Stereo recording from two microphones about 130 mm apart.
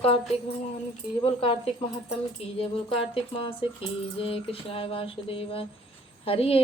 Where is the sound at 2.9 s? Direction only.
45° left (ahead or behind).